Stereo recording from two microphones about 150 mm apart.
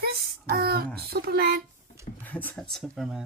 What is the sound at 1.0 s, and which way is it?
Speech, 90° right.